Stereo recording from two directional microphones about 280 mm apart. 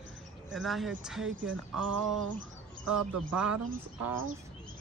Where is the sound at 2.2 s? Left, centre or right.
Right.